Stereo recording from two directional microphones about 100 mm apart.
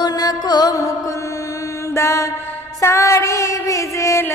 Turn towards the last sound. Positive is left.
turn(degrees=30)  # may be behind; listen again after turning